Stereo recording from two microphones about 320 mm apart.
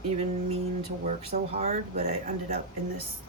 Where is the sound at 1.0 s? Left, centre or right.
Right.